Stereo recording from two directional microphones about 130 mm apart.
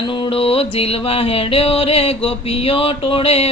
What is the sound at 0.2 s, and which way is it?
Music, 45° left (ahead or behind).